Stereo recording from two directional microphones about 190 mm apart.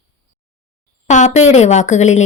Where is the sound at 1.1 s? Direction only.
40° left (ahead or behind).